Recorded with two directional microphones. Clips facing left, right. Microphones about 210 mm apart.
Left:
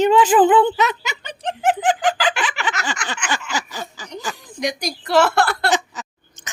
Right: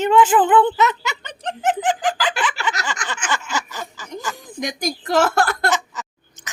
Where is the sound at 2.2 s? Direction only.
15° left (ahead or behind).